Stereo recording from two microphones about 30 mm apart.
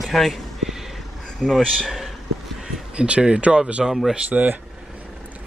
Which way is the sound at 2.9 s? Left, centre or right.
Right.